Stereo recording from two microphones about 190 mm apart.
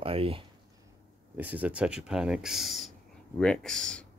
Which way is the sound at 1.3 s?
10° right (ahead or behind).